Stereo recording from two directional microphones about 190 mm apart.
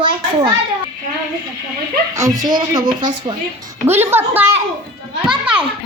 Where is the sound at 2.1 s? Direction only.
15° right (ahead or behind).